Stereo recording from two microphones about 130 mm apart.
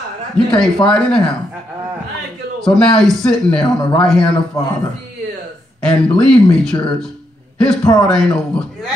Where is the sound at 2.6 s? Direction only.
5° left (ahead or behind).